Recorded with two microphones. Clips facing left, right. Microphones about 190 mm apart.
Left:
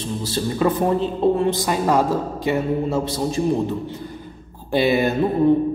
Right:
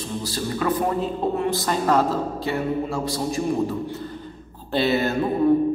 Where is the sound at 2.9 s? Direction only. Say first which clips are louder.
Left 3 dB; 25° left (ahead or behind).